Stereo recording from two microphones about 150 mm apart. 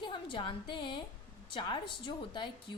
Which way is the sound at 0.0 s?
35° left (ahead or behind).